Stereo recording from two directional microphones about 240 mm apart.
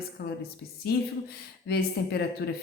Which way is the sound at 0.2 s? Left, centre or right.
Left.